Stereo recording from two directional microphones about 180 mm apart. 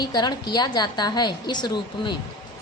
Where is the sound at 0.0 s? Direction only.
25° left (ahead or behind).